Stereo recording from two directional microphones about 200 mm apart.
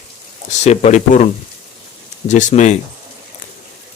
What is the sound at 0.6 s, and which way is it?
Speech, 35° left (ahead or behind).